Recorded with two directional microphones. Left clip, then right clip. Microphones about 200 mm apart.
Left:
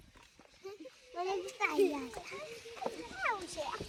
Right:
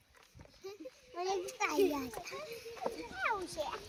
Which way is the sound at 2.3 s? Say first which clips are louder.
Right 1 dB; centre (ahead or behind).